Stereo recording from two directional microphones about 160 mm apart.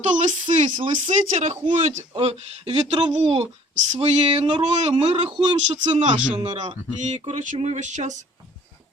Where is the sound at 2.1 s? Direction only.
35° right (ahead or behind).